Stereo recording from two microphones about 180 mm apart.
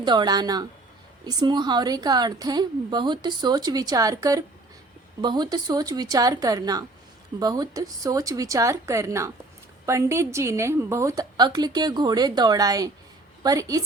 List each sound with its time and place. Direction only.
0.0 s a woman's voice: 25° right (ahead or behind)